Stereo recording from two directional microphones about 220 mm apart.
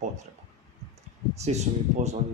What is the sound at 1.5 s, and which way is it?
Speech, 30° right (ahead or behind).